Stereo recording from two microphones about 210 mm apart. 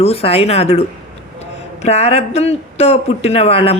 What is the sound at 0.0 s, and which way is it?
Speech, 30° left (ahead or behind).